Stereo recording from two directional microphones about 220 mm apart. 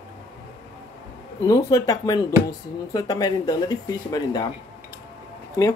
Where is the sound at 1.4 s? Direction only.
15° left (ahead or behind).